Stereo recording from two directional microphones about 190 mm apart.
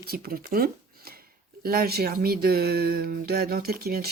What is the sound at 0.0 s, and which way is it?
Speech, 55° right (ahead or behind).